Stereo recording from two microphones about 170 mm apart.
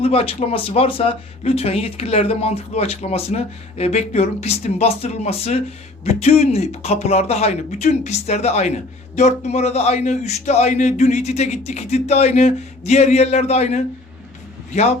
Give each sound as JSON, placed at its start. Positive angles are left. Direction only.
{"t": 0.0, "sound": "a man's voice", "side_deg": 35}